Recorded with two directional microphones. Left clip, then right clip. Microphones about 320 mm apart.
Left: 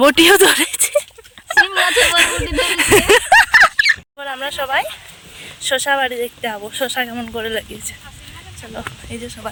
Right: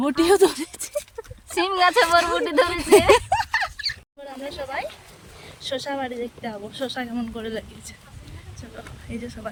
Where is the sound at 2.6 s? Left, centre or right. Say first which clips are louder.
Left 3 dB; centre.